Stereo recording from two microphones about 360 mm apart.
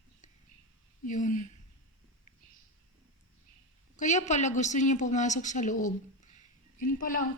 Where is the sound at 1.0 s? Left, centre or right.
Left.